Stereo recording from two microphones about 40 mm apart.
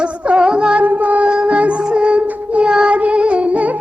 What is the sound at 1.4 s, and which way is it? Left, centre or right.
Music, right.